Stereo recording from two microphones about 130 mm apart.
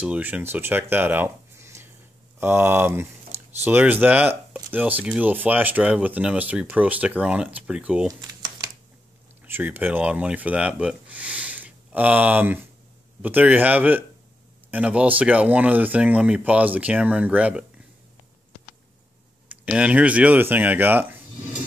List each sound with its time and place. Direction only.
0.0 s speech: 10° right (ahead or behind)
8.1 s a sound: 30° right (ahead or behind)
9.4 s speech: 15° right (ahead or behind)
19.5 s speech: 10° right (ahead or behind)